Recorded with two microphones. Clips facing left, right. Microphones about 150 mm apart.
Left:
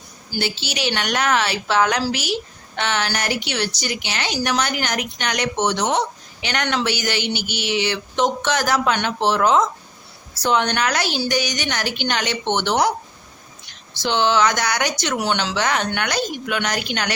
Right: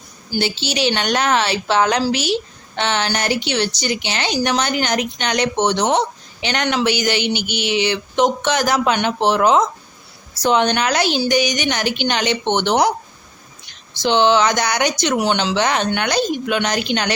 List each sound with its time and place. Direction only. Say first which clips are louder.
0.3 s a woman's voice: right 4 dB; 25° right (ahead or behind)
14.0 s a woman's voice: right 3 dB; 20° right (ahead or behind)